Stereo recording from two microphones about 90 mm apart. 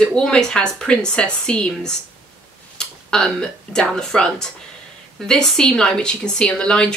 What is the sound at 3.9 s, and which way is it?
Speech, 5° left (ahead or behind).